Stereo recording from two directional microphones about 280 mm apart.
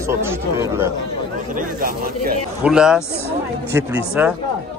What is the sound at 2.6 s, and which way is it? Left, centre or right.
A man's voice, centre.